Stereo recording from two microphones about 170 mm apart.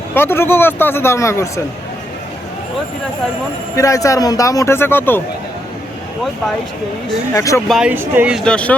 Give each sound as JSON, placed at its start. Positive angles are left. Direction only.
{"t": 0.1, "sound": "a man's voice", "side_deg": 15}
{"t": 3.8, "sound": "speech", "side_deg": 20}
{"t": 7.3, "sound": "a man's voice", "side_deg": 15}
{"t": 7.7, "sound": "speech", "side_deg": -5}
{"t": 8.4, "sound": "a man's voice", "side_deg": 5}